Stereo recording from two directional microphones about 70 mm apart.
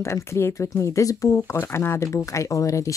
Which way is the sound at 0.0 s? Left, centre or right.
Left.